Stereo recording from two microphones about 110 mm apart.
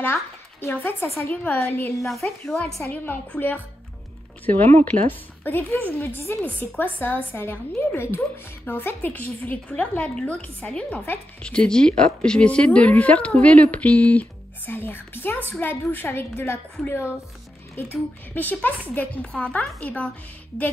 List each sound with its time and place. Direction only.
0.0 s a woman's voice: 20° left (ahead or behind)
4.9 s a woman's voice: 15° left (ahead or behind)